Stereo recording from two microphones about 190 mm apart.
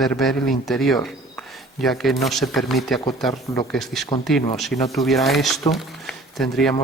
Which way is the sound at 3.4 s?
15° left (ahead or behind).